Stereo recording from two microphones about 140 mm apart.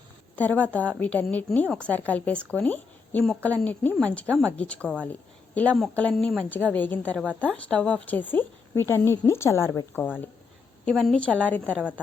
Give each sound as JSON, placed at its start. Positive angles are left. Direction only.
{"t": 0.3, "sound": "a woman's voice", "side_deg": 10}
{"t": 10.8, "sound": "a woman's voice", "side_deg": 5}